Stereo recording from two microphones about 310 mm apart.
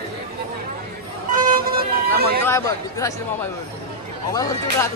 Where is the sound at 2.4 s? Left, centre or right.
Centre.